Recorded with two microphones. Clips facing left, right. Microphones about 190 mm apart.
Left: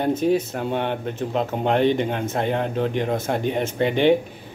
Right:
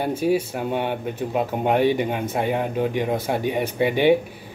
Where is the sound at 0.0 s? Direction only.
10° right (ahead or behind).